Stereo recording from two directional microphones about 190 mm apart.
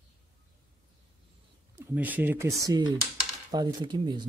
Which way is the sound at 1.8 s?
10° right (ahead or behind).